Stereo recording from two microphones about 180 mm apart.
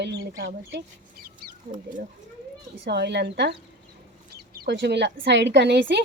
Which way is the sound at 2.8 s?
70° right (ahead or behind).